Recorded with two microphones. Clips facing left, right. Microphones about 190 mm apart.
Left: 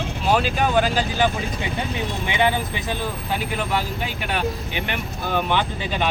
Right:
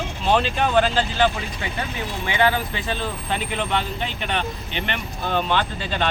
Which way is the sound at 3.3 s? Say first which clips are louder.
Even; 5° left (ahead or behind).